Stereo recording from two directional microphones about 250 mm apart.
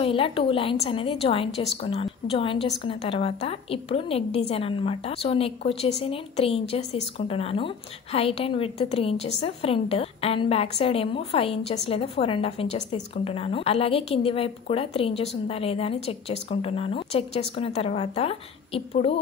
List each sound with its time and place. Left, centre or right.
0.0 s a woman's voice: left